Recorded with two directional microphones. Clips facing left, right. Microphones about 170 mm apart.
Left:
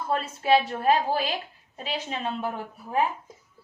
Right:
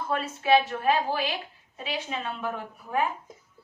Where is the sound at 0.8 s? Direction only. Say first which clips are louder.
Left 2 dB; 40° left (ahead or behind).